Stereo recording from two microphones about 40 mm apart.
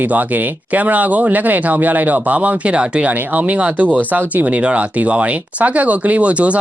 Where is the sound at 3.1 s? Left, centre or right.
Right.